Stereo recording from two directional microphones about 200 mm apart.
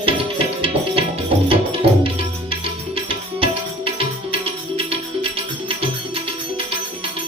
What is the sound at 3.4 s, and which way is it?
Tabla, 25° right (ahead or behind).